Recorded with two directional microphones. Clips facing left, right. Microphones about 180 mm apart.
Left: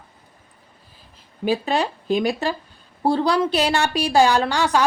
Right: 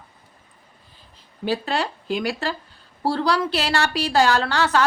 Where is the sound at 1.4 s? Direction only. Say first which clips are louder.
Left 3 dB; 15° left (ahead or behind).